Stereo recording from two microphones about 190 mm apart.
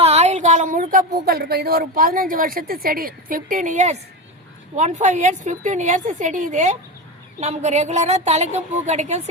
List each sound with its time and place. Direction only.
0.0 s a woman's voice: 35° right (ahead or behind)